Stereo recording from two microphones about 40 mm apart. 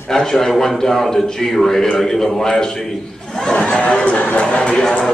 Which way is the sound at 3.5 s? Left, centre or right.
Left.